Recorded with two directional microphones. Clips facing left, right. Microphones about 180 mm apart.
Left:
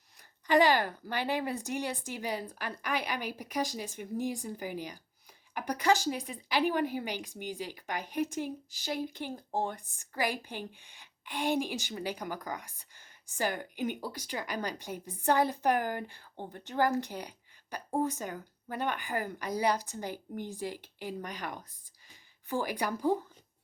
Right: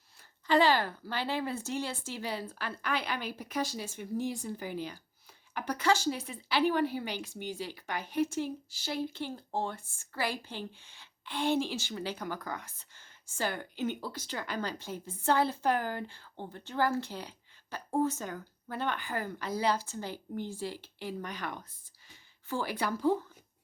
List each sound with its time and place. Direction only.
0.4 s a woman's voice: 15° left (ahead or behind)